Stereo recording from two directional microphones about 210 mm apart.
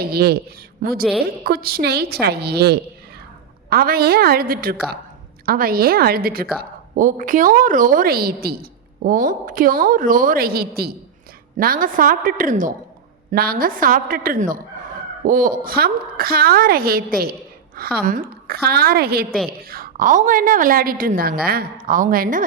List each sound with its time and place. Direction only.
0.0 s a woman's voice: 50° right (ahead or behind)